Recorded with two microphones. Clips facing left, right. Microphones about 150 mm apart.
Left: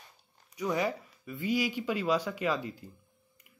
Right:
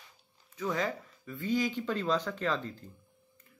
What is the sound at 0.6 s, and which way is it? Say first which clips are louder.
Speech: left 2 dB; 10° left (ahead or behind).